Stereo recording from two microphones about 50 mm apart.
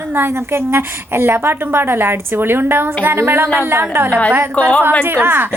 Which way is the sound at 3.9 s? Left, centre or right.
Right.